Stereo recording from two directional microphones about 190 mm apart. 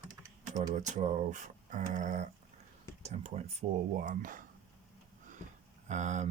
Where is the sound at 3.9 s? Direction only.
45° right (ahead or behind).